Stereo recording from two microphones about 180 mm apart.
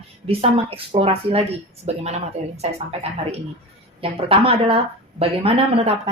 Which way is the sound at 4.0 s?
30° right (ahead or behind).